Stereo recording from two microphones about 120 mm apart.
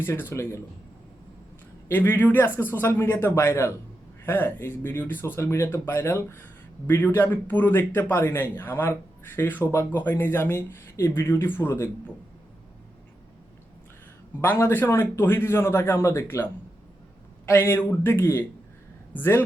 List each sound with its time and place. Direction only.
0.0 s a man's voice: 20° left (ahead or behind)
1.9 s a man's voice: 15° left (ahead or behind)
14.4 s a man's voice: 15° left (ahead or behind)